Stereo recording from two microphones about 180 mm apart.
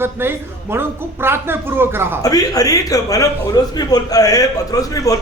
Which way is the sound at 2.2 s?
20° left (ahead or behind).